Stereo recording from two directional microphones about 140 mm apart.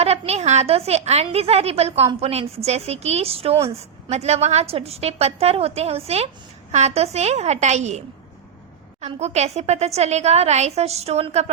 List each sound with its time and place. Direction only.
0.0 s a woman's voice: 50° right (ahead or behind)